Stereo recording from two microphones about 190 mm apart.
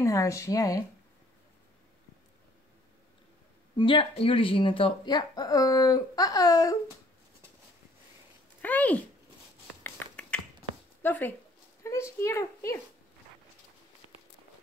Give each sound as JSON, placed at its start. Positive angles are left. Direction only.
{"t": 0.0, "sound": "speech", "side_deg": 15}
{"t": 3.7, "sound": "speech", "side_deg": 25}
{"t": 8.5, "sound": "a sound", "side_deg": 10}
{"t": 9.8, "sound": "finger snapping", "side_deg": 10}
{"t": 11.0, "sound": "speech", "side_deg": 10}